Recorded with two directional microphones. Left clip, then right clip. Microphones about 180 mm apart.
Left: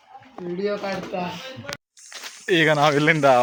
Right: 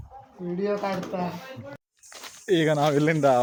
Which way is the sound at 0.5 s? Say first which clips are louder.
Left 1 dB; 40° right (ahead or behind).